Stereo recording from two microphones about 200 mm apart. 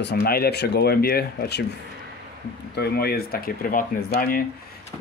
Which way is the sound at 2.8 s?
50° left (ahead or behind).